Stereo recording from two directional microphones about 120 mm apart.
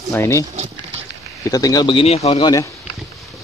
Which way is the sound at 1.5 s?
30° left (ahead or behind).